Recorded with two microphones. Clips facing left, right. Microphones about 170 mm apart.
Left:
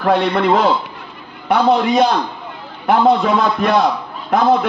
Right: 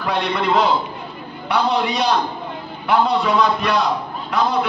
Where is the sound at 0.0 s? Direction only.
50° left (ahead or behind).